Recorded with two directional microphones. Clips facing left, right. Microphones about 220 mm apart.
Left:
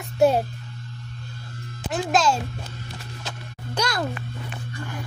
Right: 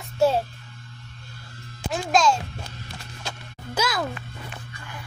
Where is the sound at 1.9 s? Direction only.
5° left (ahead or behind).